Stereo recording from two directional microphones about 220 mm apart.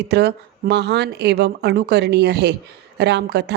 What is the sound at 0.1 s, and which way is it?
Speech, 45° right (ahead or behind).